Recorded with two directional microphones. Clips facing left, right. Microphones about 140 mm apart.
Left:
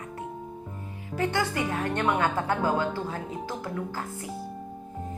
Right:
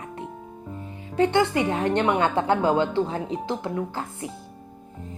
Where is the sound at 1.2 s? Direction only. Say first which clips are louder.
Right 7 dB; 20° right (ahead or behind).